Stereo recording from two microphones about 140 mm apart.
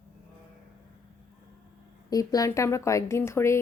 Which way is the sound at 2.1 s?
25° left (ahead or behind).